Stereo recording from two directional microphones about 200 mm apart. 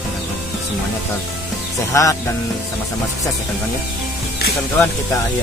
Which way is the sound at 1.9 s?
15° left (ahead or behind).